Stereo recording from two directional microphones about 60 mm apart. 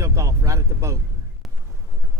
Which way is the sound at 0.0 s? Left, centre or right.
Right.